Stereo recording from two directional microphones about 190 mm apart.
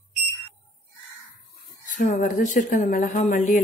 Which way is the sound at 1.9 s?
40° left (ahead or behind).